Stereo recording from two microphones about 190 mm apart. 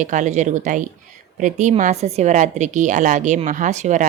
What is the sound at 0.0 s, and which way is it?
Speech, 40° right (ahead or behind).